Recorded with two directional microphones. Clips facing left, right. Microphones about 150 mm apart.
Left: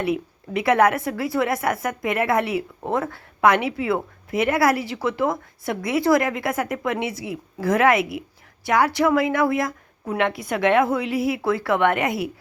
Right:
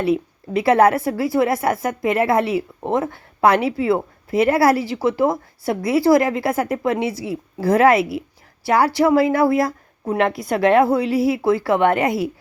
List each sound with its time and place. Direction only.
0.0 s a woman's voice: 30° right (ahead or behind)